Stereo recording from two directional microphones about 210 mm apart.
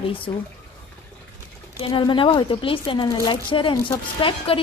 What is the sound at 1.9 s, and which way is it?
Speech, 25° left (ahead or behind).